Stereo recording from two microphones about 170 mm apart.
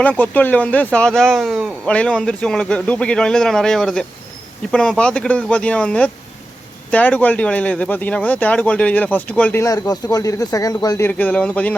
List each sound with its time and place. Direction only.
0.0 s speech: 10° left (ahead or behind)